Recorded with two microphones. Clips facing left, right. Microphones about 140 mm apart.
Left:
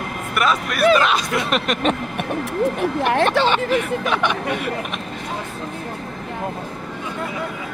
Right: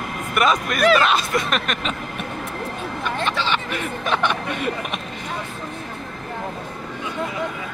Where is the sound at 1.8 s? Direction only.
70° left (ahead or behind).